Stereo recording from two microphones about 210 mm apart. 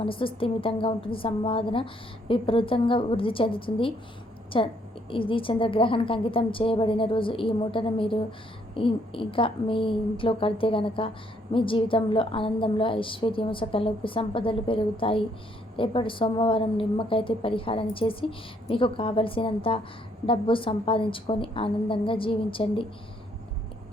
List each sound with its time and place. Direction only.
0.0 s a woman's voice: 25° left (ahead or behind)